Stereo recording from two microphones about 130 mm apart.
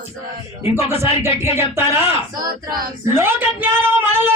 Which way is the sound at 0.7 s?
20° right (ahead or behind).